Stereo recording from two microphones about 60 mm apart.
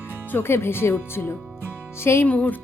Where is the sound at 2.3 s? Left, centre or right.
Left.